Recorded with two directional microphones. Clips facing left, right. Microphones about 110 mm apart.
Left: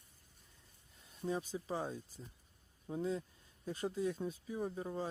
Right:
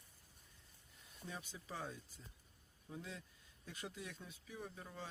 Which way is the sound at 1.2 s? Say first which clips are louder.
Left 12 dB; 35° left (ahead or behind).